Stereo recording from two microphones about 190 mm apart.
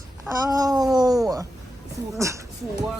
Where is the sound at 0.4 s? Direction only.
20° right (ahead or behind).